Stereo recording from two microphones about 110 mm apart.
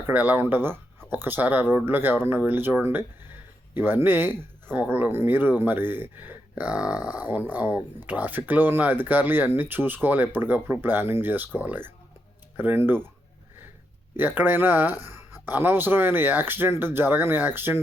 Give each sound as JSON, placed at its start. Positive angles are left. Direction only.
{"t": 0.0, "sound": "speech", "side_deg": -15}
{"t": 14.2, "sound": "speech", "side_deg": -15}